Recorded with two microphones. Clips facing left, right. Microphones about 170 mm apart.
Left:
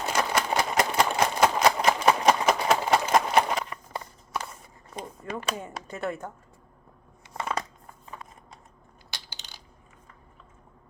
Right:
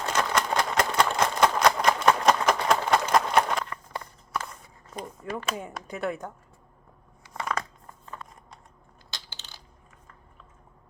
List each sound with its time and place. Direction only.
0.0 s a sound: 10° left (ahead or behind)
5.2 s speech: 5° right (ahead or behind)
9.0 s crushing: 15° left (ahead or behind)